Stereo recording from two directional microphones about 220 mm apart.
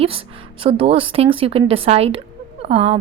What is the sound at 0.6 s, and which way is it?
A woman's voice, 25° right (ahead or behind).